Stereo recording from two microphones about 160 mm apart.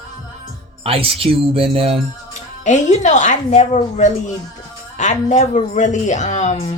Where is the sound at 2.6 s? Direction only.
50° left (ahead or behind).